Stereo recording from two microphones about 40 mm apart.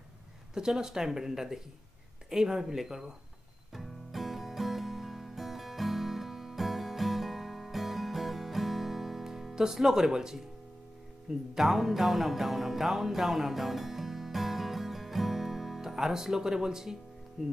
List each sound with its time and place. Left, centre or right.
0.6 s speech: centre
3.7 s music: centre
11.5 s music: centre
17.4 s speech: right